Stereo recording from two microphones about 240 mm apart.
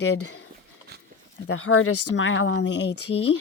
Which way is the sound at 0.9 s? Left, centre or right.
Right.